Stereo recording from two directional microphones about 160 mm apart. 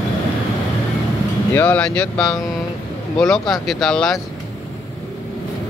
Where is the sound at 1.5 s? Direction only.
10° left (ahead or behind).